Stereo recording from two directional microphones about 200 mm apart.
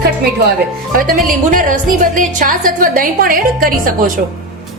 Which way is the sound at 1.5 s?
40° right (ahead or behind).